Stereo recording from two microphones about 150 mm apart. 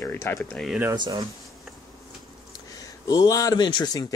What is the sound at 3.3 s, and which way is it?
Speech, 20° left (ahead or behind).